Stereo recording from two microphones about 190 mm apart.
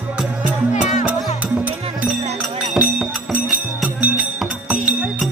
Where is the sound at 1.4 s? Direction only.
5° right (ahead or behind).